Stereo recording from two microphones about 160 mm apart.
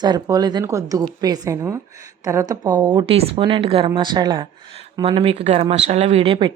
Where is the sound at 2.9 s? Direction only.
30° right (ahead or behind).